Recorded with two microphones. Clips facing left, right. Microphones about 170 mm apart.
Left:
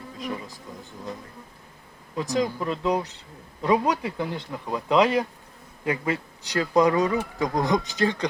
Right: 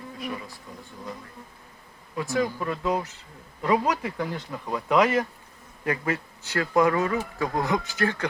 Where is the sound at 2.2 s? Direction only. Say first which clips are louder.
Left 1 dB; 20° left (ahead or behind).